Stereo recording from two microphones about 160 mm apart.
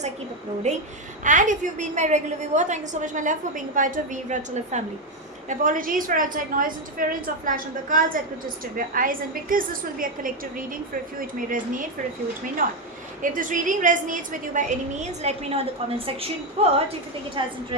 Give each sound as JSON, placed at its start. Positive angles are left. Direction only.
{"t": 0.7, "sound": "a woman's voice", "side_deg": -45}